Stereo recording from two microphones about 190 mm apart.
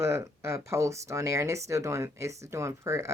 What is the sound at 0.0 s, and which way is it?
Speech, 15° right (ahead or behind).